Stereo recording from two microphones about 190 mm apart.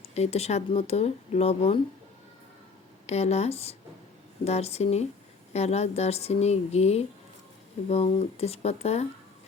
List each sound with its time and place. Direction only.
0.1 s speech: 35° left (ahead or behind)
3.1 s speech: 35° left (ahead or behind)